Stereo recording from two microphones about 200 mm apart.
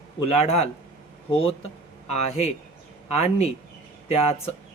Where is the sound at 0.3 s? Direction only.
30° left (ahead or behind).